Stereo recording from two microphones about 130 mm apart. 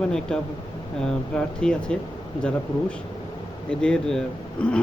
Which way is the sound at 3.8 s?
5° left (ahead or behind).